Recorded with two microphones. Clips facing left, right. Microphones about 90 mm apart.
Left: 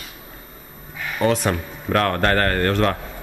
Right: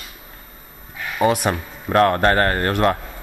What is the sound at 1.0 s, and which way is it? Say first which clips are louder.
Speech: right 1 dB; 10° right (ahead or behind).